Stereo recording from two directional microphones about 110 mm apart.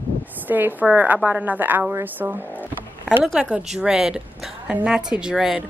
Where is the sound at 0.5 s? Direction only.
15° right (ahead or behind).